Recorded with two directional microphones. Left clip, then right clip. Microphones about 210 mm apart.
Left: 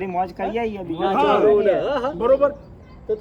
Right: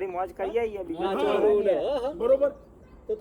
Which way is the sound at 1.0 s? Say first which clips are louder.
Left 7 dB; 10° left (ahead or behind).